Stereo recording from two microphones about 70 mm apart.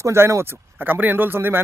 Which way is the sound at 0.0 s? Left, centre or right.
Right.